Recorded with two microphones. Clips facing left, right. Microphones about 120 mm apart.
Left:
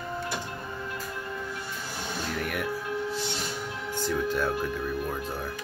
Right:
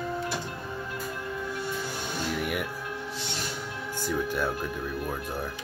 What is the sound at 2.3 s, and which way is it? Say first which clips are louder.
Music: right 2 dB; 10° right (ahead or behind).